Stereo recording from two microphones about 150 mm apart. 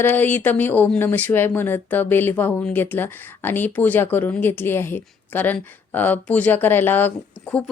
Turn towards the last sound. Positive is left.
turn(degrees=5)  # may be behind; listen again after turning